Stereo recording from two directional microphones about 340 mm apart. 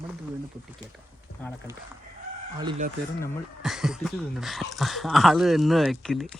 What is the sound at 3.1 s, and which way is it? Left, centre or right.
Speech, centre.